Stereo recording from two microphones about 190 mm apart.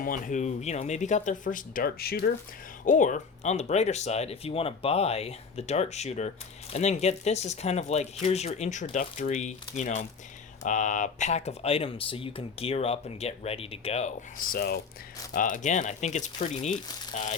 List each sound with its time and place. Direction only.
0.0 s speech: 45° left (ahead or behind)
2.8 s speech: 40° left (ahead or behind)